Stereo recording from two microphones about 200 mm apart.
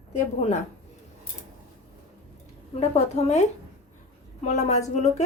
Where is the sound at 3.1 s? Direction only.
35° left (ahead or behind).